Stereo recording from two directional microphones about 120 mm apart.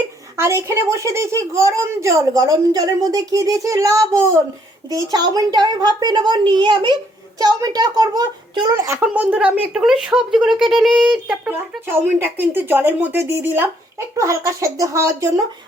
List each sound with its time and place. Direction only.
0.3 s a child's voice: 25° right (ahead or behind); by 10.5 s 5° right (ahead or behind)
10.6 s a sound: centre (ahead or behind)
11.4 s a child's voice: 15° right (ahead or behind)